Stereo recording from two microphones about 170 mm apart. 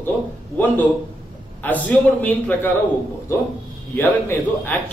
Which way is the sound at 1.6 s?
10° left (ahead or behind).